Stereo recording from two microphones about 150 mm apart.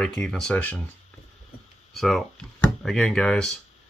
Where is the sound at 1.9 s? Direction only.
Centre (ahead or behind).